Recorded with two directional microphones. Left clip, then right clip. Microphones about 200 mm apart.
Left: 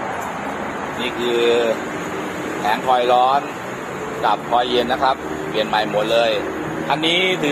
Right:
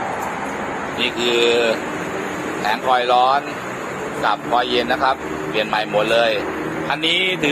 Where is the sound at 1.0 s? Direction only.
Centre (ahead or behind).